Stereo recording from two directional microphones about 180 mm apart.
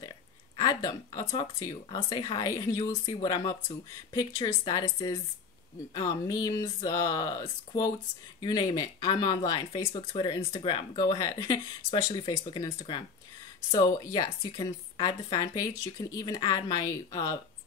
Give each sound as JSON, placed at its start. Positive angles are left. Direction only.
{"t": 0.6, "sound": "speech", "side_deg": 20}